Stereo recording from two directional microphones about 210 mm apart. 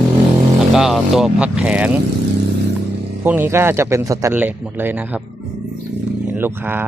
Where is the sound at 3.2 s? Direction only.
10° right (ahead or behind).